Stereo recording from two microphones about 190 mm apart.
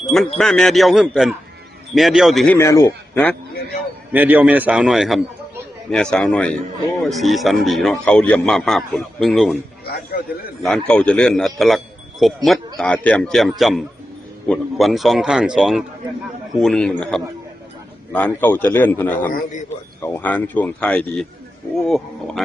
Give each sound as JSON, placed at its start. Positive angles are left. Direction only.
{"t": 0.3, "sound": "a man's voice", "side_deg": 0}
{"t": 2.6, "sound": "a man's voice", "side_deg": 15}
{"t": 4.1, "sound": "a man's voice", "side_deg": -10}
{"t": 9.8, "sound": "a man's voice", "side_deg": 55}
{"t": 10.6, "sound": "a man's voice", "side_deg": 5}